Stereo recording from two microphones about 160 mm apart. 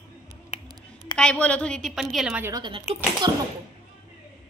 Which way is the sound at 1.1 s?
5° left (ahead or behind).